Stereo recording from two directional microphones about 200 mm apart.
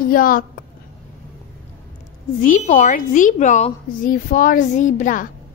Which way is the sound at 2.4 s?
40° left (ahead or behind).